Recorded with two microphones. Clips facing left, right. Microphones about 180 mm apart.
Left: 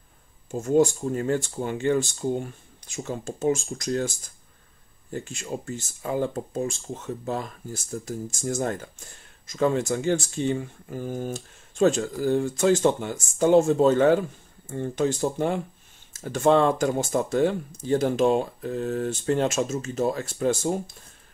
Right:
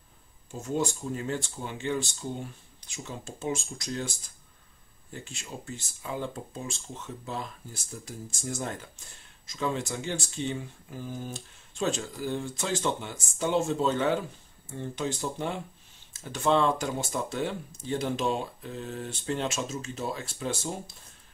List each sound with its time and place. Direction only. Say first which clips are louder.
0.5 s speech: left 10 dB; 50° left (ahead or behind)
5.1 s speech: left 9 dB; 45° left (ahead or behind)